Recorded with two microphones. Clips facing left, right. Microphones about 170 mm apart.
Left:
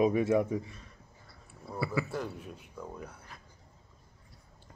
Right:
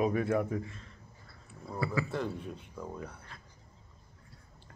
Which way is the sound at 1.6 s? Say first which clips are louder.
Even; 5° left (ahead or behind).